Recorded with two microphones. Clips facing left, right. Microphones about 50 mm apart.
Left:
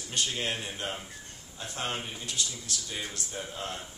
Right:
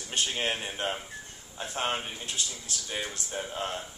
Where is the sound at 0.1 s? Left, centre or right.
Right.